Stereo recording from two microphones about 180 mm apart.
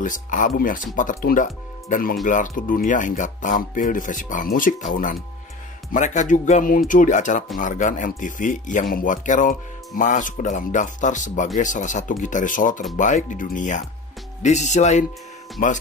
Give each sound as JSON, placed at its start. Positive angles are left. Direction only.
{"t": 0.0, "sound": "speech", "side_deg": 45}
{"t": 15.6, "sound": "speech", "side_deg": 50}